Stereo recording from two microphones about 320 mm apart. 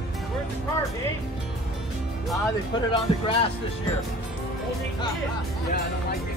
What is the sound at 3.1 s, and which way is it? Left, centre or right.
Speech, centre.